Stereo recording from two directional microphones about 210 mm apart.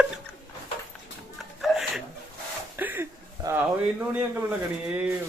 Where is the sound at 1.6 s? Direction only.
Centre (ahead or behind).